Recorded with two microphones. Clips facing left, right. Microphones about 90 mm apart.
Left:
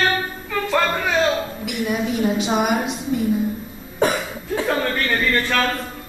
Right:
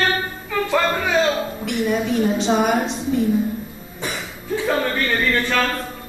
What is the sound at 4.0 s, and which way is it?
Cough, 55° left (ahead or behind).